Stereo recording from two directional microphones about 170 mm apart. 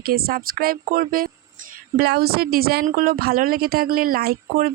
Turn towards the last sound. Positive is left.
turn(degrees=-60)  # may be behind; listen again after turning